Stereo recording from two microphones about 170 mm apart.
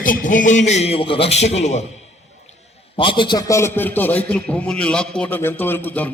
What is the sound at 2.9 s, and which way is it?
A man's voice, 30° left (ahead or behind).